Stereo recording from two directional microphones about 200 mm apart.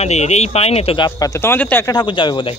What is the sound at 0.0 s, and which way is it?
Speech, 35° left (ahead or behind).